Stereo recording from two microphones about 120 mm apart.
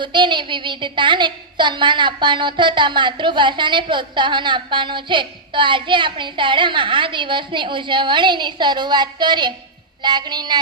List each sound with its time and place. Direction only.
0.0 s a woman's voice: 40° right (ahead or behind)